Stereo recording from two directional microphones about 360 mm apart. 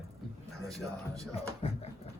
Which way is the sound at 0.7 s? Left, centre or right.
Centre.